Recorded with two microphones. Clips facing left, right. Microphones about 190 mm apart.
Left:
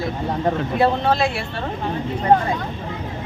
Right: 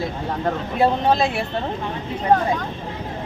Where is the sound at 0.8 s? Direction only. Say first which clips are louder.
Right 1 dB; 15° right (ahead or behind).